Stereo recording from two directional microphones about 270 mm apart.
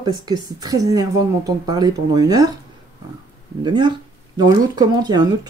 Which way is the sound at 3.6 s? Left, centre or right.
Centre.